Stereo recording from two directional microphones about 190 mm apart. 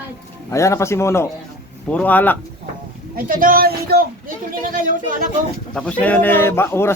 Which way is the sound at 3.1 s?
45° right (ahead or behind).